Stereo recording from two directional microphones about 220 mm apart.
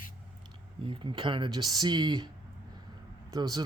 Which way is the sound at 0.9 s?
25° right (ahead or behind).